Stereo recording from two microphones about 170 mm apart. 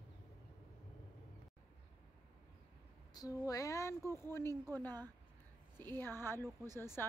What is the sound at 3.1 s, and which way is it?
Female singing, 20° left (ahead or behind).